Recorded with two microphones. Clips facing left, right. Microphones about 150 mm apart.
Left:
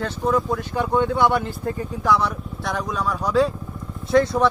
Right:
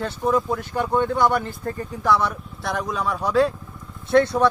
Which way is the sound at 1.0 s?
10° left (ahead or behind).